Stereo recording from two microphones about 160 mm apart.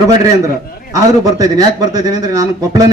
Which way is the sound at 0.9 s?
20° right (ahead or behind).